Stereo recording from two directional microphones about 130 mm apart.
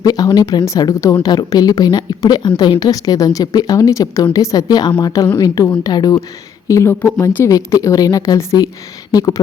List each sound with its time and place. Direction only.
0.0 s a woman's voice: 30° left (ahead or behind)